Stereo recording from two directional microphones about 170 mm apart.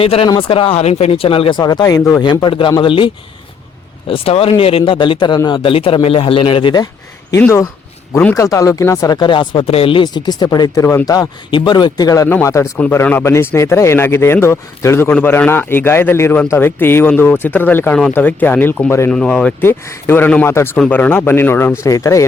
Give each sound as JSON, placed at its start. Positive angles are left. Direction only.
{"t": 0.0, "sound": "a man's voice", "side_deg": 35}
{"t": 4.1, "sound": "a man's voice", "side_deg": 35}
{"t": 7.3, "sound": "speech", "side_deg": 15}